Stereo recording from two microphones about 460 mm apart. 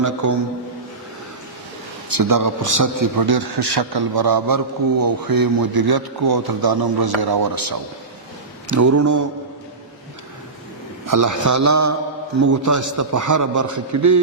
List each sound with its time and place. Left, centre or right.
0.0 s a man's voice: right
2.0 s a man's voice: right
11.0 s a man's voice: right